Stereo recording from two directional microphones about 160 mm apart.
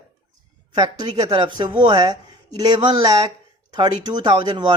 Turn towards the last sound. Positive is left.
turn(degrees=-30)  # may be behind; listen again after turning